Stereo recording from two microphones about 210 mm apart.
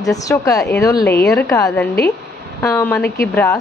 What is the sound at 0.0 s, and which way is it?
A woman's voice, 15° left (ahead or behind).